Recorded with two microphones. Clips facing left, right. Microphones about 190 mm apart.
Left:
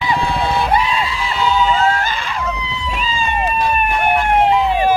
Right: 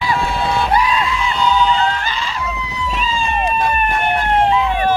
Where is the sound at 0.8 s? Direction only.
30° left (ahead or behind).